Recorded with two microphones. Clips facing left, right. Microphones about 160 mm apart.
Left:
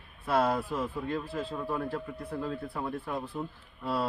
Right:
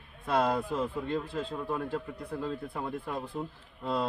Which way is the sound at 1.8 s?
5° left (ahead or behind).